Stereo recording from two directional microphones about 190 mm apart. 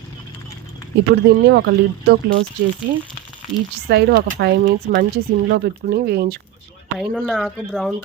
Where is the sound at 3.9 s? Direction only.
55° right (ahead or behind).